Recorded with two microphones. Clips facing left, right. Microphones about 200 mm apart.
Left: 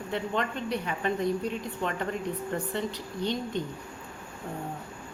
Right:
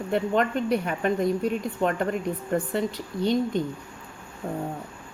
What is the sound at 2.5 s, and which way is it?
Speech, 45° right (ahead or behind).